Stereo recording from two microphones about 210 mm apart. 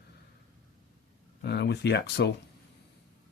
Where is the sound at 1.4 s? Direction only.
55° left (ahead or behind).